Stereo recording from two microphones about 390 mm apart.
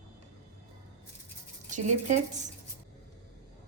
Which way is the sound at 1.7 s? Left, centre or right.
Centre.